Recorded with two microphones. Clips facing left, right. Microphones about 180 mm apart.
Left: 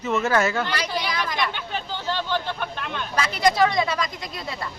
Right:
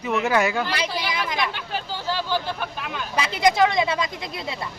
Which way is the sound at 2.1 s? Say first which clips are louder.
Right 1 dB; 5° right (ahead or behind).